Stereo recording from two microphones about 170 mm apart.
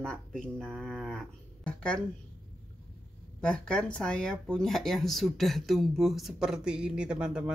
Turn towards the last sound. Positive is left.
turn(degrees=-5)  # may be behind; listen again after turning